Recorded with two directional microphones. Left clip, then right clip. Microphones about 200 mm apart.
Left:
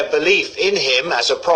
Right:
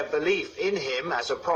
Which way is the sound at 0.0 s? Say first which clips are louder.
Left 10 dB; 30° left (ahead or behind).